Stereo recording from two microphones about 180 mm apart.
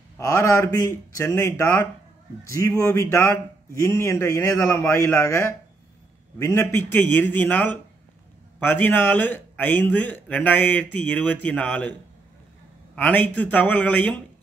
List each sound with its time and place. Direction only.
0.2 s a man's voice: 15° left (ahead or behind)
12.9 s a man's voice: 10° left (ahead or behind)